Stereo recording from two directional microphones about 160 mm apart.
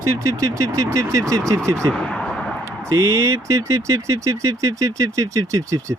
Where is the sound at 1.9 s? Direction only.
5° left (ahead or behind).